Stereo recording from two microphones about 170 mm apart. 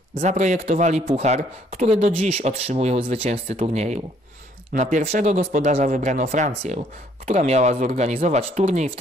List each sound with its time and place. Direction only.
0.2 s speech: 45° right (ahead or behind)